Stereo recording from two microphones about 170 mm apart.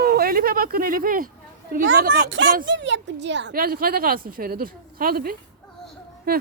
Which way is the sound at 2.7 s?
90° right.